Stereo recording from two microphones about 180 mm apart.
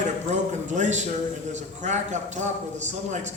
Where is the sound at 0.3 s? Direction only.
40° right (ahead or behind).